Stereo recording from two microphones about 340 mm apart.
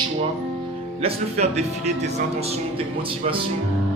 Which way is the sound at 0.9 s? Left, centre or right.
Centre.